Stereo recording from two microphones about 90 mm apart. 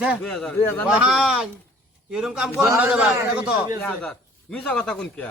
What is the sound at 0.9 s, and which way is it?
A man's voice, 10° right (ahead or behind).